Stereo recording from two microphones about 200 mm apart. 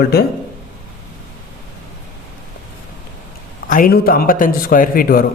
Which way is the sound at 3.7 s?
45° left (ahead or behind).